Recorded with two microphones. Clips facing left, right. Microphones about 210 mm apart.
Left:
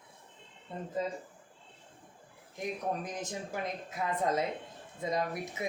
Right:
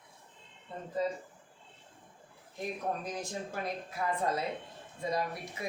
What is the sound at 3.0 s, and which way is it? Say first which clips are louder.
Speech: even; 20° left (ahead or behind).